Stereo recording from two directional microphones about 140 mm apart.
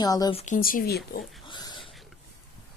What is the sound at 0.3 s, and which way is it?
Speech, 65° left (ahead or behind).